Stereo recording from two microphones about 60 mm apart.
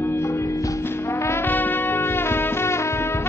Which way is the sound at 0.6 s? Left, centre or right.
Left.